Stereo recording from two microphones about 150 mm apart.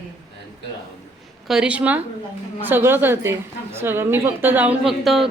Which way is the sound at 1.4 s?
5° right (ahead or behind).